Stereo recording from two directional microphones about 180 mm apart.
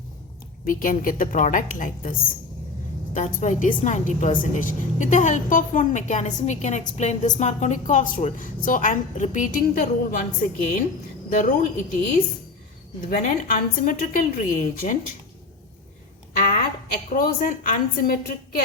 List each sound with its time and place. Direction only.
0.6 s a woman's voice: 50° left (ahead or behind)
13.1 s a woman's voice: 50° left (ahead or behind)
16.3 s a sound: 55° left (ahead or behind)
17.1 s a woman's voice: 45° left (ahead or behind)